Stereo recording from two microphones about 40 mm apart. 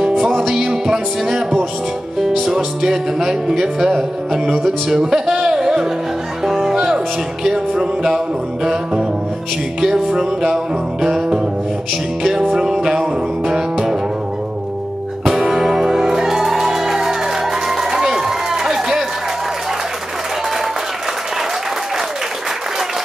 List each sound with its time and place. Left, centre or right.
0.2 s music: centre
9.8 s music: centre
15.2 s music: centre
17.6 s run: centre